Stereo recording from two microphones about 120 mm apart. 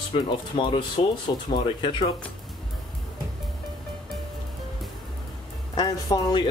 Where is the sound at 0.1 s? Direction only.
45° left (ahead or behind).